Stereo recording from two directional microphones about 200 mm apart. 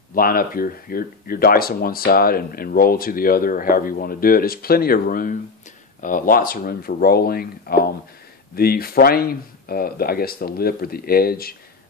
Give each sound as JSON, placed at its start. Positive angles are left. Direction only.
{"t": 0.1, "sound": "speech", "side_deg": 45}